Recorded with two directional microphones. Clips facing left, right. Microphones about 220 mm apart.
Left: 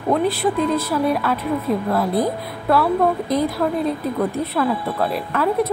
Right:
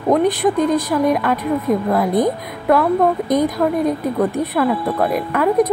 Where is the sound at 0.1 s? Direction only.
15° right (ahead or behind).